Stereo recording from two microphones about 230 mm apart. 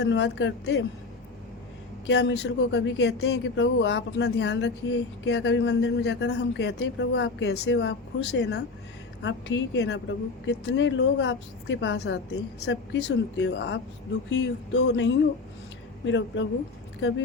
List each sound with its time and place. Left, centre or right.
0.0 s a woman's voice: left
2.0 s a woman's voice: left